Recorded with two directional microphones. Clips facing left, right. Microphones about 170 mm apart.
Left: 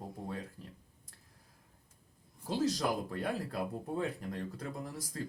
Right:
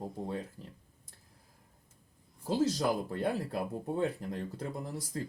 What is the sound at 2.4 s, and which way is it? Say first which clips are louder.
Speech: right 3 dB; 25° right (ahead or behind).